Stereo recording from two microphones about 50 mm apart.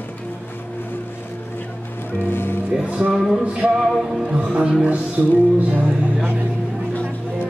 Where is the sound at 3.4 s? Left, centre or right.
Right.